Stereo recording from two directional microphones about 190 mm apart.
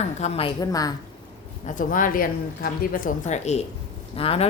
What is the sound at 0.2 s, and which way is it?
Speech, 30° left (ahead or behind).